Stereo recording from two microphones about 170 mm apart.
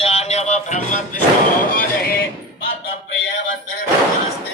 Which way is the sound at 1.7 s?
55° left (ahead or behind).